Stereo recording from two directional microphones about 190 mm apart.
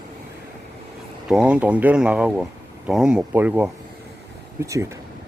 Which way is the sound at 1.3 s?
5° right (ahead or behind).